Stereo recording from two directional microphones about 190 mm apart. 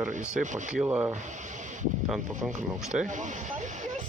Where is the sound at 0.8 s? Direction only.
15° right (ahead or behind).